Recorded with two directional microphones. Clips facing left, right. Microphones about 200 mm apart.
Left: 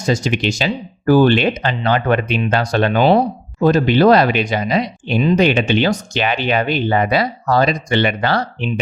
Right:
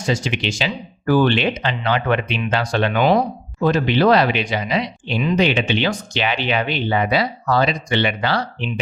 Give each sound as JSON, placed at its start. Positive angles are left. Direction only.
{"t": 0.0, "sound": "speech", "side_deg": 40}